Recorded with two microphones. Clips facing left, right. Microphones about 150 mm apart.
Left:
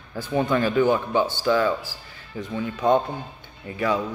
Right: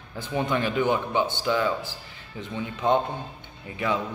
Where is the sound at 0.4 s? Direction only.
20° right (ahead or behind).